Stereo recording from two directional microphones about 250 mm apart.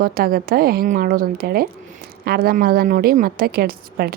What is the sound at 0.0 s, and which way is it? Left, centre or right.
A woman's voice, right.